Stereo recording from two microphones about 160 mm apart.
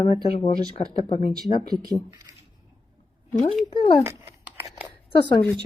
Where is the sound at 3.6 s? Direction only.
30° left (ahead or behind).